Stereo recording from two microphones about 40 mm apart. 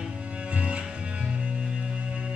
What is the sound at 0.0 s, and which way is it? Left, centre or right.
Music, right.